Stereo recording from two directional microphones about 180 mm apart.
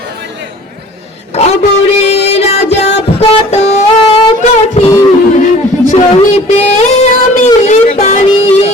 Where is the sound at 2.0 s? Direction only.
35° left (ahead or behind).